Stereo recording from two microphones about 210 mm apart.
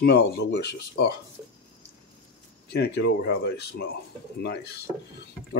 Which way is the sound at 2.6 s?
50° left (ahead or behind).